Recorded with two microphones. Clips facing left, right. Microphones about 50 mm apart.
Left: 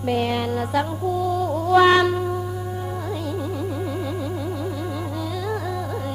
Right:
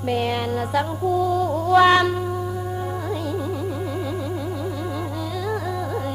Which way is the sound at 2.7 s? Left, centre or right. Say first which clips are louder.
Right 2 dB; centre.